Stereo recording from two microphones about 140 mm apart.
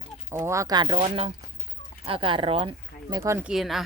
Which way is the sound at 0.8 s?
45° right (ahead or behind).